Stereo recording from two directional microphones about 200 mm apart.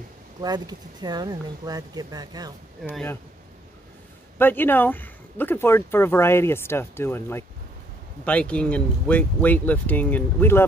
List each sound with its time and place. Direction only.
0.4 s speech: 20° right (ahead or behind)
2.9 s speech: 10° left (ahead or behind)
4.4 s speech: 10° left (ahead or behind)